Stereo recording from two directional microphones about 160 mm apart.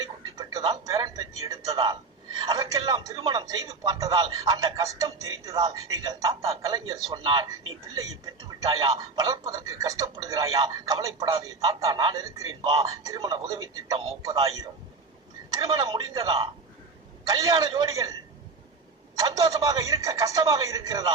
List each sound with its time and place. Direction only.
0.0 s music: 25° right (ahead or behind)
1.5 s a man's voice: 25° right (ahead or behind)
19.1 s a man's voice: 20° right (ahead or behind)